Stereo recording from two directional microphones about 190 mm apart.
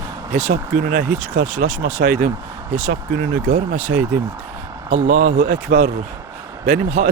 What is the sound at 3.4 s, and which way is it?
Speech, 40° right (ahead or behind).